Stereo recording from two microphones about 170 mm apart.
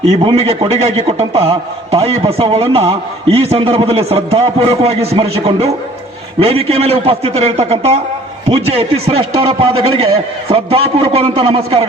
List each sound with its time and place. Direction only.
0.1 s a man's voice: 35° right (ahead or behind)